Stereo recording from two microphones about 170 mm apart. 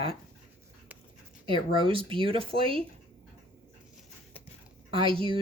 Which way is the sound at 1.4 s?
30° right (ahead or behind).